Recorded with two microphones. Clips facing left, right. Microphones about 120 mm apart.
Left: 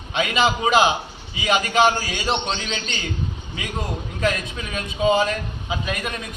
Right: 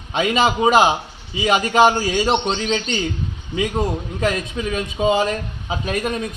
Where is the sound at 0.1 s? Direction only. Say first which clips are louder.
Right 3 dB; 40° right (ahead or behind).